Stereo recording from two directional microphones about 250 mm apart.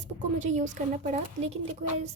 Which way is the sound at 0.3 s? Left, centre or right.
Right.